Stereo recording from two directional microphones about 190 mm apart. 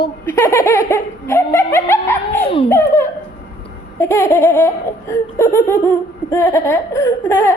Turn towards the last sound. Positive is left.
turn(degrees=15)  # may be behind; listen again after turning